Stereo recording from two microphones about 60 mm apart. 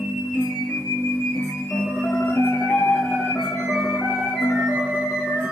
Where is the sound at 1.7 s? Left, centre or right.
Centre.